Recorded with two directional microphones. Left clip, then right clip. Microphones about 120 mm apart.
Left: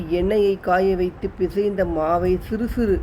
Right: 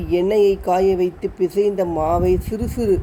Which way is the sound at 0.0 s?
25° right (ahead or behind).